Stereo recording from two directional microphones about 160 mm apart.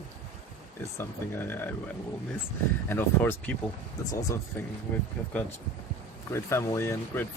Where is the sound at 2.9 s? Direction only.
15° left (ahead or behind).